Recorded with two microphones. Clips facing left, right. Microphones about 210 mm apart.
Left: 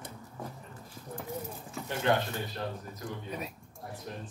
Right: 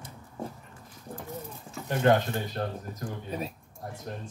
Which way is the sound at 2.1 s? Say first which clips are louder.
Right 5 dB; 45° right (ahead or behind).